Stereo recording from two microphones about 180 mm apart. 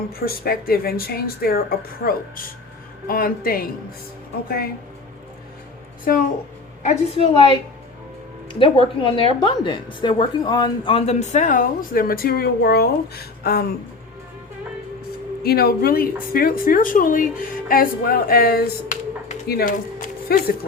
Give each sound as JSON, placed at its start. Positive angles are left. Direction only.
{"t": 0.1, "sound": "speech", "side_deg": 55}
{"t": 6.1, "sound": "speech", "side_deg": 50}
{"t": 6.8, "sound": "a woman's voice", "side_deg": 35}
{"t": 8.5, "sound": "a woman's voice", "side_deg": 30}
{"t": 15.4, "sound": "speech", "side_deg": 60}